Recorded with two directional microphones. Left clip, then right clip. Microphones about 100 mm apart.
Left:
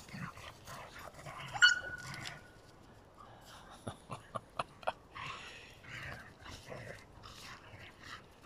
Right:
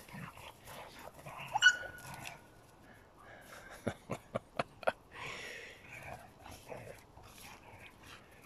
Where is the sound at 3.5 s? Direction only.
90° right.